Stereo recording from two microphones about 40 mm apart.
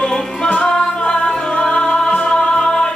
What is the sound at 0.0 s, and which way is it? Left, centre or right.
Music, centre.